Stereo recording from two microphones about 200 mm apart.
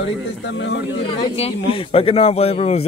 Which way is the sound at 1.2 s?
30° left (ahead or behind).